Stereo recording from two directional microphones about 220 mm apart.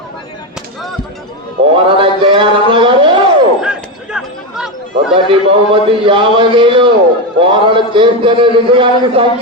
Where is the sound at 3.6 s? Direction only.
5° right (ahead or behind).